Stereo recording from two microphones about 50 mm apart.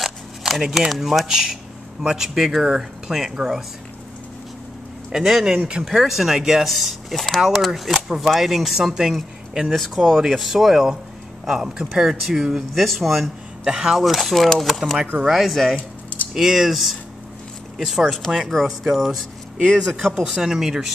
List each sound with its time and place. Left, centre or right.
0.0 s speech: centre
5.1 s speech: centre
5.9 s speech: centre
9.7 s speech: centre
13.7 s speech: centre
14.0 s speech: centre
15.7 s keys jangling: left
16.3 s speech: centre
20.2 s speech: centre